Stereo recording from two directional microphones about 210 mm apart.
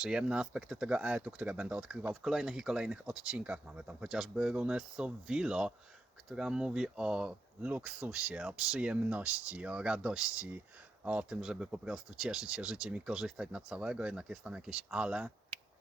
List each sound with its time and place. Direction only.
0.0 s speech: 5° right (ahead or behind)